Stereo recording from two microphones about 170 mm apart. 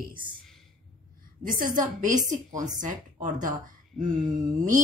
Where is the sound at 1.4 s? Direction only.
55° right (ahead or behind).